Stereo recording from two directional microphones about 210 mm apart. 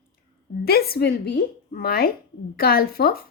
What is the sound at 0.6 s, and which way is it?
A woman's voice, 45° left (ahead or behind).